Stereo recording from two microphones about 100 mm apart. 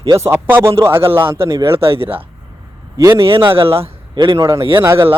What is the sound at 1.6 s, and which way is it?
Speech, 60° right (ahead or behind).